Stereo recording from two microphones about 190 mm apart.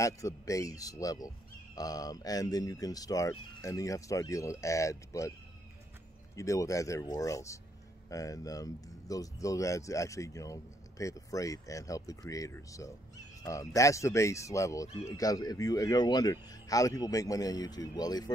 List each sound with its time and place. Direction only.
0.0 s speech: 15° left (ahead or behind)
6.3 s a man's voice: 15° left (ahead or behind)